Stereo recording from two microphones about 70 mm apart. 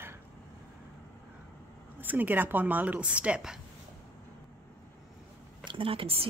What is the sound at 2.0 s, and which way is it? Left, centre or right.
Speech, right.